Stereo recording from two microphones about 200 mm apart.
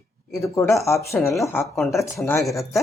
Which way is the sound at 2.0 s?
15° left (ahead or behind).